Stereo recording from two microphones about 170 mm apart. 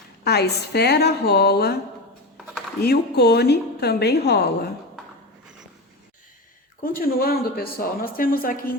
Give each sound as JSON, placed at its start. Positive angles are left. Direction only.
{"t": 0.3, "sound": "a woman's voice", "side_deg": 75}
{"t": 2.8, "sound": "a woman's voice", "side_deg": 70}
{"t": 6.8, "sound": "speech", "side_deg": 60}